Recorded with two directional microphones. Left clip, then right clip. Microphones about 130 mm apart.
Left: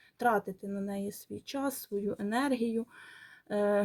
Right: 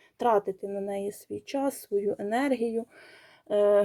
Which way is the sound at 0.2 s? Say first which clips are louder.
Right 5 dB; 30° right (ahead or behind).